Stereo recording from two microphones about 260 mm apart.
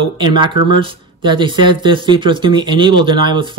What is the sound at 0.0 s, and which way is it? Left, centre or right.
Speech, centre.